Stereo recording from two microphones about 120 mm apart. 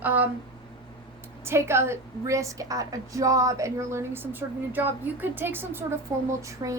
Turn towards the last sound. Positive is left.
turn(degrees=-35)  # may be behind; listen again after turning